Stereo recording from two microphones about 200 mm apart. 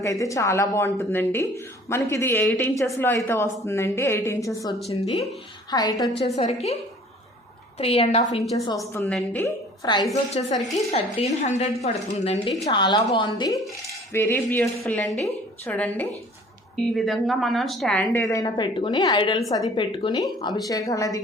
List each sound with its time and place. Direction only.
0.0 s a woman's voice: 15° left (ahead or behind)
4.9 s a woman's voice: 30° left (ahead or behind)
5.7 s a woman's voice: 20° left (ahead or behind)
6.3 s a woman's voice: 30° left (ahead or behind)
7.8 s a woman's voice: 30° left (ahead or behind)
8.7 s a woman's voice: 15° left (ahead or behind)
9.8 s a woman's voice: 20° left (ahead or behind)
10.4 s a woman's voice: 30° left (ahead or behind)
13.8 s cutlery: 10° left (ahead or behind)
15.6 s a woman's voice: 10° left (ahead or behind)